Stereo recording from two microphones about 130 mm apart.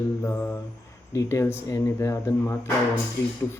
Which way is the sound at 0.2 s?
15° left (ahead or behind).